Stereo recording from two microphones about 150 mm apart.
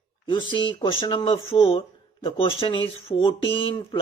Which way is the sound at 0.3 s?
35° left (ahead or behind).